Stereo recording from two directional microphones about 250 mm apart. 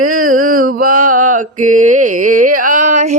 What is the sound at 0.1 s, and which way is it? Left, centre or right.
Mantra, right.